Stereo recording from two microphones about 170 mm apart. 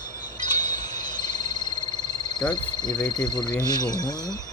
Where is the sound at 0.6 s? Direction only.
25° left (ahead or behind).